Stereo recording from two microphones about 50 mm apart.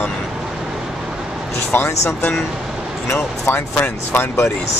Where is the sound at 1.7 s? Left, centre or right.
Left.